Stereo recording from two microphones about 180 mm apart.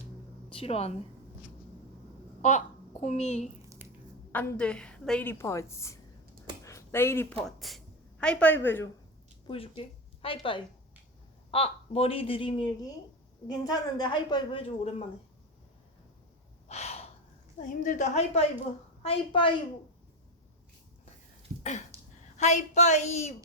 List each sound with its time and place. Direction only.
0.5 s speech: 35° left (ahead or behind)
2.4 s speech: 40° left (ahead or behind)
4.3 s a woman's voice: 10° left (ahead or behind)
9.5 s a woman's voice: 30° left (ahead or behind)
13.7 s a woman's voice: 25° left (ahead or behind)
16.6 s gasp: 35° left (ahead or behind)
17.6 s a woman's voice: 45° left (ahead or behind); by 19.5 s 30° left (ahead or behind)
21.6 s a sound: 40° left (ahead or behind)
22.4 s speech: 40° left (ahead or behind)